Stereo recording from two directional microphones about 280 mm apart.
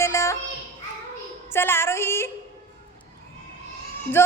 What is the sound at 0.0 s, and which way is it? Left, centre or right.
Children playing, centre.